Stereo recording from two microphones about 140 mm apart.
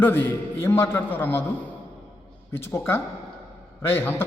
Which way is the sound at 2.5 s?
15° left (ahead or behind).